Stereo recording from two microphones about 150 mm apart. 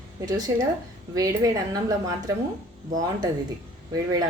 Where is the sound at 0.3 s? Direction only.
25° right (ahead or behind).